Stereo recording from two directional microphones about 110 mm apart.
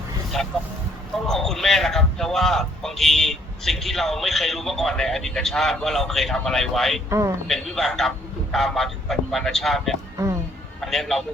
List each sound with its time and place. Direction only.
0.3 s speech: centre (ahead or behind)
7.1 s a man's voice: 30° right (ahead or behind)
7.4 s a man's voice: 5° left (ahead or behind)